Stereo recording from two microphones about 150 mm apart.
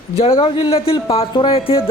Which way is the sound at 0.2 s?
40° left (ahead or behind).